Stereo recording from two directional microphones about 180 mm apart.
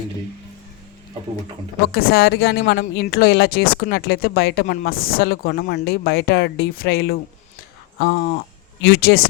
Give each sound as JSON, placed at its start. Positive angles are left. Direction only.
{"t": 1.9, "sound": "speech", "side_deg": 60}